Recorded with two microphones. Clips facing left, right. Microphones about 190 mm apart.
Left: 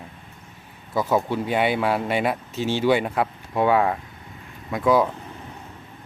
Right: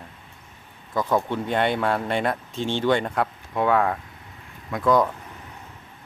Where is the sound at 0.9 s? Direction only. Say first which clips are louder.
Left 1 dB; 5° left (ahead or behind).